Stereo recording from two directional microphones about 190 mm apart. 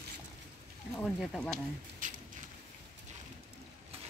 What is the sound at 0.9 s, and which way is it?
Speech, centre (ahead or behind).